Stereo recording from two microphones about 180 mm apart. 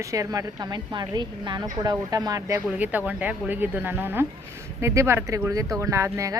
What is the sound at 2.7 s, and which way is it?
Speech, 10° right (ahead or behind).